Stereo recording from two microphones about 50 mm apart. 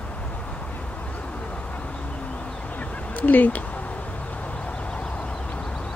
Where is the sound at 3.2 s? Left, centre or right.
Left.